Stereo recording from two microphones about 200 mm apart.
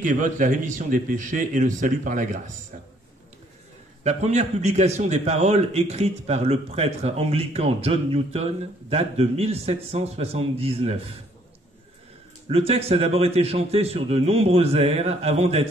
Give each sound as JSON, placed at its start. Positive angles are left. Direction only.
{"t": 0.0, "sound": "a man's voice", "side_deg": -40}
{"t": 4.0, "sound": "a man's voice", "side_deg": -35}
{"t": 12.4, "sound": "a man's voice", "side_deg": -30}